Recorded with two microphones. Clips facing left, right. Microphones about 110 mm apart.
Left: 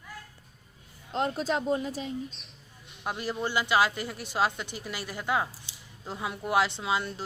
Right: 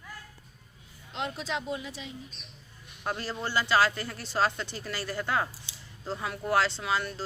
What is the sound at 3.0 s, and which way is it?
Speech, 15° left (ahead or behind).